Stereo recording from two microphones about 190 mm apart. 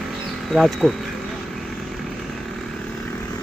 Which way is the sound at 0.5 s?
Centre (ahead or behind).